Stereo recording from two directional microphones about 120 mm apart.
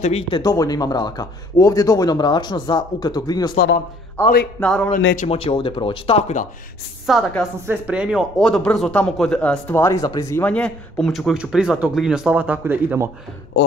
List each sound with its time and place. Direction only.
0.3 s speech: 30° left (ahead or behind)
4.2 s speech: 15° left (ahead or behind)
4.6 s speech: 5° left (ahead or behind)
4.9 s speech: 90° left
5.3 s speech: 50° left (ahead or behind)
7.1 s a woman's voice: centre (ahead or behind)
7.6 s speech: 15° right (ahead or behind)
8.4 s speech: 5° left (ahead or behind); by 10.4 s 25° left (ahead or behind)
10.4 s speech: 10° left (ahead or behind); by 13.1 s 20° right (ahead or behind)